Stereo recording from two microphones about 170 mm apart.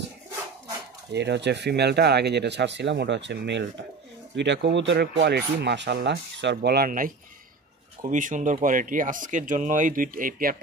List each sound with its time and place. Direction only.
1.1 s speech: 90° right; by 10.6 s 55° right (ahead or behind)